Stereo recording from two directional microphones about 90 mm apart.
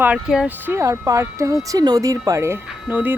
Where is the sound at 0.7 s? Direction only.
35° right (ahead or behind).